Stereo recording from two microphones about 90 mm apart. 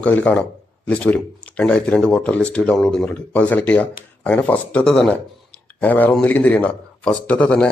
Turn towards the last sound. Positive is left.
turn(degrees=15)  # may be behind; listen again after turning